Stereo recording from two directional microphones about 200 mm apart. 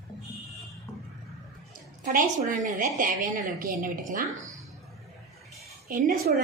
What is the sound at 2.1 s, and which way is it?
A woman's voice, 40° right (ahead or behind).